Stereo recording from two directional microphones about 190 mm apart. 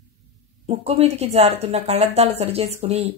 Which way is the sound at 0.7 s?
30° right (ahead or behind).